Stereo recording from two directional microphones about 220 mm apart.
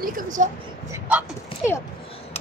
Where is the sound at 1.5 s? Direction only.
25° left (ahead or behind).